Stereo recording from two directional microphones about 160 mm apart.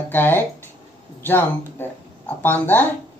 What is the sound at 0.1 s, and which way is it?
Speech, 15° left (ahead or behind).